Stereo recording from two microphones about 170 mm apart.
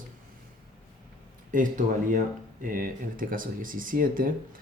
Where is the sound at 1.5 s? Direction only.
50° right (ahead or behind).